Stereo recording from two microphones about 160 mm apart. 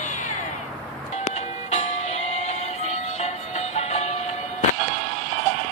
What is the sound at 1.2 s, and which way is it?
Music, 45° left (ahead or behind).